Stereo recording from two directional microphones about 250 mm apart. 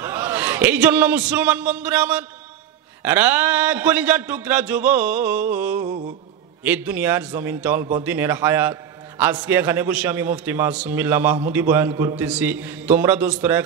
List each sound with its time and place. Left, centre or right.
0.0 s a man's voice: centre